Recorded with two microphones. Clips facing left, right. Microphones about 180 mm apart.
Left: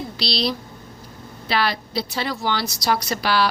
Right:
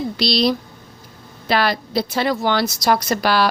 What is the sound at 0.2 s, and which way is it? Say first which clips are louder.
A woman's voice: right 6 dB; 50° right (ahead or behind).